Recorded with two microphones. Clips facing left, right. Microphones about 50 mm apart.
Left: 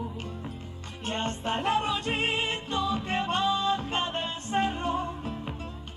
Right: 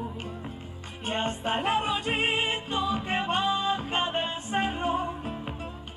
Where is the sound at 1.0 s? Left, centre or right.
Centre.